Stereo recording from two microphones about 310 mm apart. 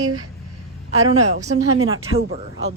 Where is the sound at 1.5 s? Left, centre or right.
Right.